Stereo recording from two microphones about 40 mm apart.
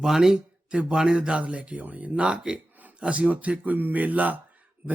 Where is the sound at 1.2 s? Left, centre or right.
Right.